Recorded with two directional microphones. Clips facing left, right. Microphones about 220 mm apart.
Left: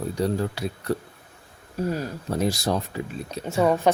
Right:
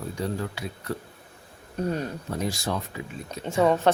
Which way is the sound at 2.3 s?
35° left (ahead or behind).